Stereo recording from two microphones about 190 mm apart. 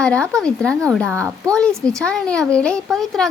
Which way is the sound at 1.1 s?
15° right (ahead or behind).